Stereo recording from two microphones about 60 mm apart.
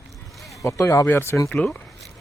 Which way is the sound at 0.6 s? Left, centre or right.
Left.